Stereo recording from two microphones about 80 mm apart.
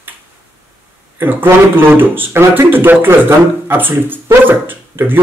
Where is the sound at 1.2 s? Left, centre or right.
Right.